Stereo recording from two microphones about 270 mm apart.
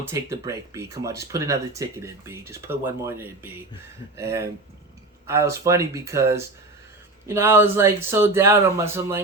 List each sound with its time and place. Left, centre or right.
0.0 s speech: centre